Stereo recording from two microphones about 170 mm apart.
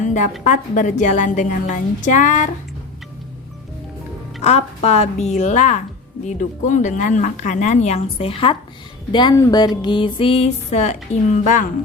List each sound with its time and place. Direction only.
0.0 s music: 45° left (ahead or behind)
0.4 s speech: 50° left (ahead or behind)
4.4 s music: 35° left (ahead or behind)
6.2 s speech: 45° left (ahead or behind)
9.1 s music: 25° left (ahead or behind); by 11.7 s 45° left (ahead or behind)